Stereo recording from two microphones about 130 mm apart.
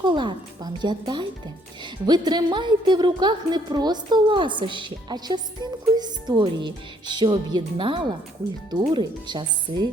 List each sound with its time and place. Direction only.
0.0 s a woman's voice: 35° right (ahead or behind)